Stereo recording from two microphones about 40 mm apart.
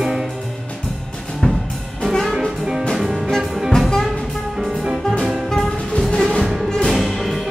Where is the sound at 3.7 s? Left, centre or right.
Centre.